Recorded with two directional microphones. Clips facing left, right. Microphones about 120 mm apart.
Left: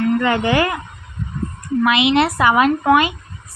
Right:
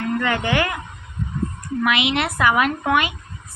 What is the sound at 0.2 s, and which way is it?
Speech, 30° left (ahead or behind).